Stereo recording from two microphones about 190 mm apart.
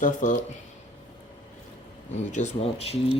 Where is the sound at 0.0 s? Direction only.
45° left (ahead or behind).